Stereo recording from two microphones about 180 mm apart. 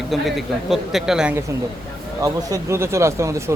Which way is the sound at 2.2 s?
15° right (ahead or behind).